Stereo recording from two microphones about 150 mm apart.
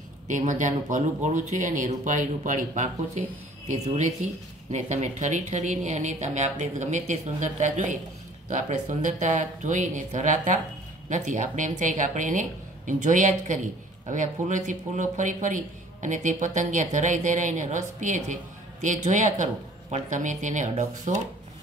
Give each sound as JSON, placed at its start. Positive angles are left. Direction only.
{"t": 0.3, "sound": "speech", "side_deg": -55}